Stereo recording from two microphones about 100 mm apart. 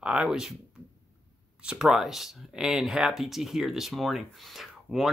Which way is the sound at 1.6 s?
5° right (ahead or behind).